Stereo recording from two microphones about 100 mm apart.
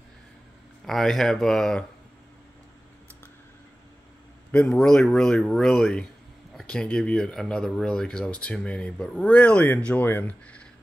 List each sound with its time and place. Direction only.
0.8 s speech: centre (ahead or behind)
4.5 s a man's voice: 15° left (ahead or behind)
4.7 s speech: 5° left (ahead or behind)